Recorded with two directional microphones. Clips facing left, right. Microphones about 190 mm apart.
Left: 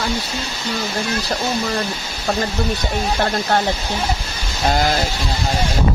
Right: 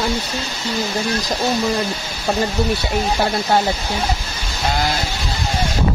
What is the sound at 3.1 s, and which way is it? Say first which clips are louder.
Speech: right 1 dB; 5° right (ahead or behind).